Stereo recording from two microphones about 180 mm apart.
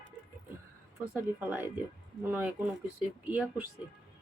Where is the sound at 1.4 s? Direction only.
10° right (ahead or behind).